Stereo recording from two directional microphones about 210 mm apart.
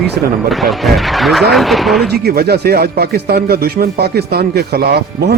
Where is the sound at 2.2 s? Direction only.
50° right (ahead or behind).